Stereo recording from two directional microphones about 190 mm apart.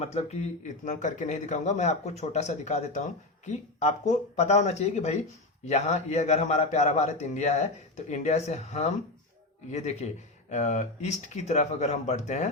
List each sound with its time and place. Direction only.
0.0 s a man's voice: 35° left (ahead or behind)